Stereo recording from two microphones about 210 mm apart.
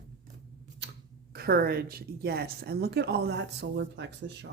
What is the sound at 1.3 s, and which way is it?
Speech, 45° right (ahead or behind).